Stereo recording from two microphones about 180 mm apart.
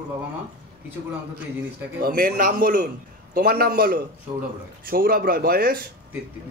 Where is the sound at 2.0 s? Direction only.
50° right (ahead or behind).